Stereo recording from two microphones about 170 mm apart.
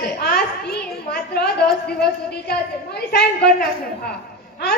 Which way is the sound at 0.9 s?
70° left (ahead or behind).